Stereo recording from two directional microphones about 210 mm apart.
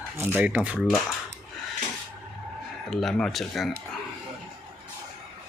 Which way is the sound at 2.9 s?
Centre (ahead or behind).